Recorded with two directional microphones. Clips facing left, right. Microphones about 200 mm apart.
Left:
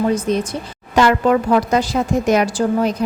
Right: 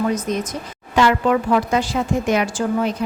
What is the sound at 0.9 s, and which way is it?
A woman's voice, 45° left (ahead or behind).